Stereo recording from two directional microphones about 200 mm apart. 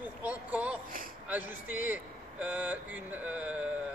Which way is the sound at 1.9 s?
5° right (ahead or behind).